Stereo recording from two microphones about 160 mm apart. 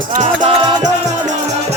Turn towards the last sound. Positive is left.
turn(degrees=-35)  # may be behind; listen again after turning